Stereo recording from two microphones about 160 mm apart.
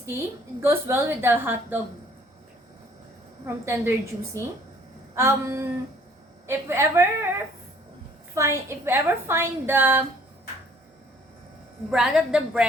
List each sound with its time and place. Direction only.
0.0 s a woman's voice: 15° right (ahead or behind)
3.4 s a woman's voice: 15° right (ahead or behind)
5.1 s a woman's voice: 15° right (ahead or behind)
11.9 s a woman's voice: 5° right (ahead or behind)